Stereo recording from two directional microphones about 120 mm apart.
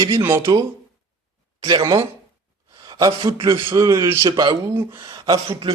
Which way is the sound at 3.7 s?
25° right (ahead or behind).